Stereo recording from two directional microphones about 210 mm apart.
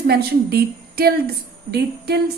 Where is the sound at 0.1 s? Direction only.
50° right (ahead or behind).